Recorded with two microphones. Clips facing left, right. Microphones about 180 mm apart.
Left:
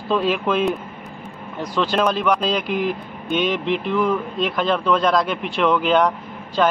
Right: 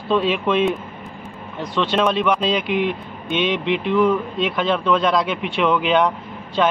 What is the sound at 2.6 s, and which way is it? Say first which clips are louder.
Speech: right 2 dB; 40° left (ahead or behind).